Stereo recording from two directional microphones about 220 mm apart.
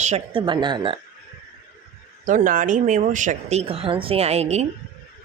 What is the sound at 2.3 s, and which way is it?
Speech, 35° right (ahead or behind).